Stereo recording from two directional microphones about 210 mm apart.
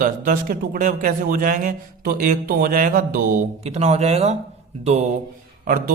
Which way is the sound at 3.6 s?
30° right (ahead or behind).